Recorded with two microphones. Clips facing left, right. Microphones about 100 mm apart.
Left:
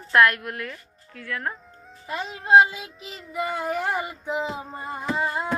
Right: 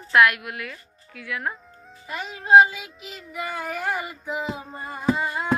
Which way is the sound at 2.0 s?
30° left (ahead or behind).